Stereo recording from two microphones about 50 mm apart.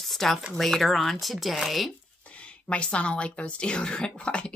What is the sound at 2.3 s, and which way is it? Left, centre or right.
Speech, left.